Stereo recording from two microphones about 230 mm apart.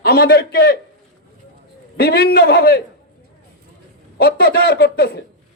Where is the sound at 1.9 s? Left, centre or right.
Left.